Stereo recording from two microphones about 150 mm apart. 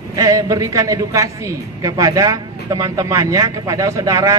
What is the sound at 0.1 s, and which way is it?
A man's voice, 25° right (ahead or behind).